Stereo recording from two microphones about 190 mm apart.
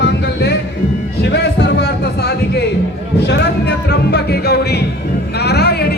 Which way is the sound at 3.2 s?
65° left (ahead or behind).